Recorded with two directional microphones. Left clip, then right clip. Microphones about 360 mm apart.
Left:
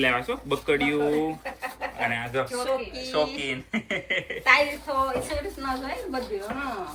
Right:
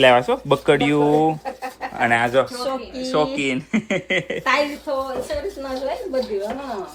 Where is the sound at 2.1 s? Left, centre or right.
Right.